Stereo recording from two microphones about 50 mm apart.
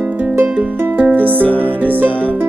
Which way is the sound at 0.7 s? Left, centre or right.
Right.